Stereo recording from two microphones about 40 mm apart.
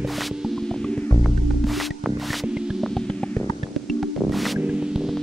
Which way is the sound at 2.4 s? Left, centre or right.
Centre.